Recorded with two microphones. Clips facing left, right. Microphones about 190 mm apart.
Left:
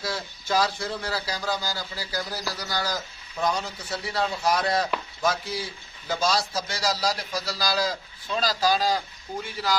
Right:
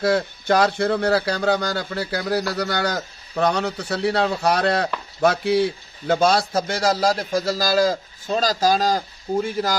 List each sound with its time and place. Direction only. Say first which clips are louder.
0.0 s a man's voice: right 12 dB; 65° right (ahead or behind); by 9.8 s 45° right (ahead or behind)